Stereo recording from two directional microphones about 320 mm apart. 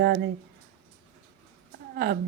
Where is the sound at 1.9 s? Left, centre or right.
Right.